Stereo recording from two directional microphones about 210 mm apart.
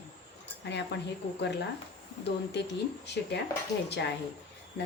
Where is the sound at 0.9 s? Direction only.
55° left (ahead or behind).